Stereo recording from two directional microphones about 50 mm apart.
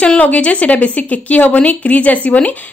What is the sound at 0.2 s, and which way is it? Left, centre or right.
A woman's voice, left.